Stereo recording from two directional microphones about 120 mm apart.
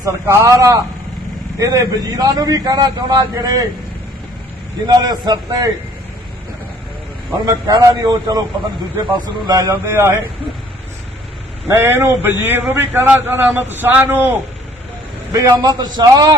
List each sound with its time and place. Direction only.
0.0 s a man's voice: 25° right (ahead or behind)
4.9 s a man's voice: 35° right (ahead or behind)
7.4 s a man's voice: 30° right (ahead or behind)
9.5 s speech: 30° right (ahead or behind)
11.7 s a man's voice: 20° right (ahead or behind)
15.3 s a man's voice: 30° right (ahead or behind)